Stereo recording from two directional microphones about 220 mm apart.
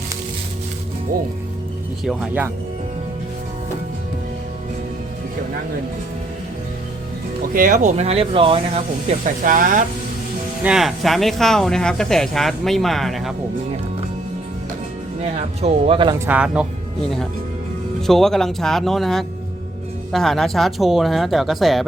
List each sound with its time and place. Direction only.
2.0 s speech: 5° right (ahead or behind)
7.5 s speech: 40° right (ahead or behind)
10.6 s speech: 5° right (ahead or behind)
15.2 s speech: 30° right (ahead or behind); by 16.6 s 5° right (ahead or behind)
18.0 s speech: centre (ahead or behind)